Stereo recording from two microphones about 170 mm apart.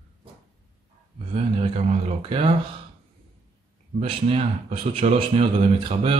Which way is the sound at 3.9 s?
35° right (ahead or behind).